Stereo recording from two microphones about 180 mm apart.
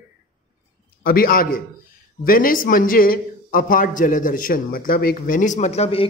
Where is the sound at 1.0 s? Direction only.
55° left (ahead or behind).